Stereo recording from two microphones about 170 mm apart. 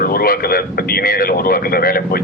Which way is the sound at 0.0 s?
60° left (ahead or behind).